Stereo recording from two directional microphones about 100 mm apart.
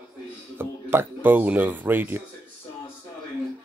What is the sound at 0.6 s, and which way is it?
Speech, 20° right (ahead or behind).